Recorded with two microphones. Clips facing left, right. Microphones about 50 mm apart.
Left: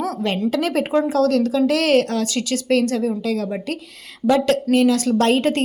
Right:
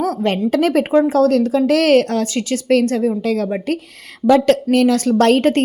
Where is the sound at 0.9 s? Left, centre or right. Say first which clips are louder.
Right 3 dB; right.